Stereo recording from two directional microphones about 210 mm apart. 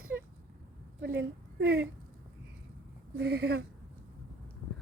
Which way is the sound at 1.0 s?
50° right (ahead or behind).